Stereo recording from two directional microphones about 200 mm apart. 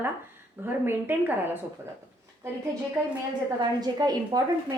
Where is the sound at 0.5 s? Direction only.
10° right (ahead or behind).